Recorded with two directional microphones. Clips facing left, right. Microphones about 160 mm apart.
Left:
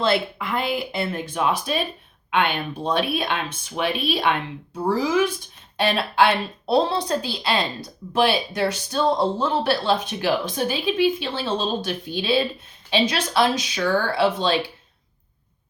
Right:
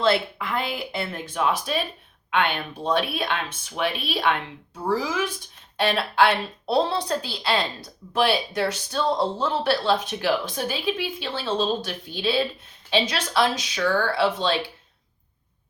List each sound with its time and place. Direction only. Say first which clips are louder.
0.0 s speech: even; 15° left (ahead or behind)